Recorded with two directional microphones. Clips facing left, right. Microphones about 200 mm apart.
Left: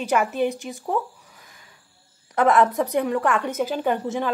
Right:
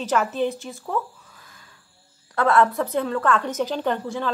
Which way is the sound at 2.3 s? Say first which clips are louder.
Left 1 dB; 15° left (ahead or behind).